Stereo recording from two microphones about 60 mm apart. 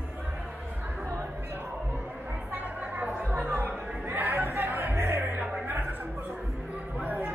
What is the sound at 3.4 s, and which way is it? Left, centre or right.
Music, right.